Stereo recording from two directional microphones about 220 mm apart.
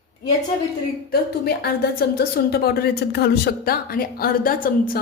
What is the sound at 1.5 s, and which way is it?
A woman's voice, 45° left (ahead or behind).